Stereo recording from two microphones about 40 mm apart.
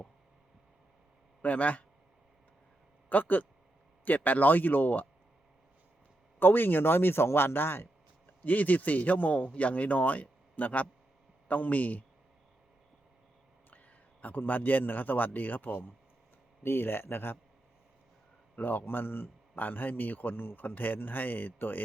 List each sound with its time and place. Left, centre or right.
1.4 s speech: left
3.1 s a man's voice: left
6.4 s speech: left
8.4 s a man's voice: left
9.5 s a man's voice: left
13.7 s a man's voice: left
16.6 s speech: left
18.5 s speech: left
19.5 s a man's voice: left